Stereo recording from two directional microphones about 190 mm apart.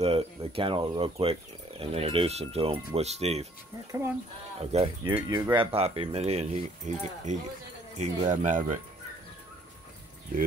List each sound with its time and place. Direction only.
0.0 s speech: 30° right (ahead or behind)
4.6 s speech: 30° right (ahead or behind)
5.1 s speech: 20° right (ahead or behind); by 8.7 s 40° right (ahead or behind)